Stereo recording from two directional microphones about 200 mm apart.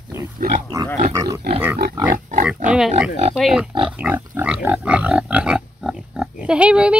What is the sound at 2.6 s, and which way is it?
Speech, 5° right (ahead or behind).